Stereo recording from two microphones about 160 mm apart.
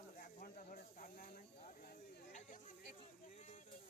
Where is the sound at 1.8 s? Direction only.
50° left (ahead or behind).